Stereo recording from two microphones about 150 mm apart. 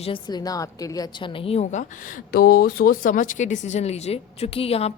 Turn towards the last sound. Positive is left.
turn(degrees=40)  # may be behind; listen again after turning